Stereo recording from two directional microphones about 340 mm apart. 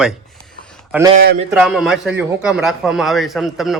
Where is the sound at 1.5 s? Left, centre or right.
Centre.